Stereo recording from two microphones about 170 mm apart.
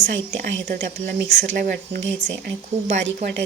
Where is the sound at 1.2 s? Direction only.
90° right.